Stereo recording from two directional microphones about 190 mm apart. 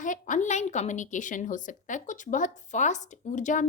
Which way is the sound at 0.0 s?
40° left (ahead or behind).